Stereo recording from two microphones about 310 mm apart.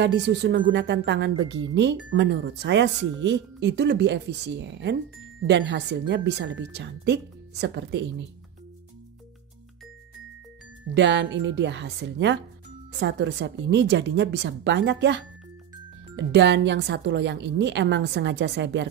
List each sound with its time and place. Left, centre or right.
0.0 s a woman's voice: right
11.0 s a woman's voice: right
16.3 s a woman's voice: right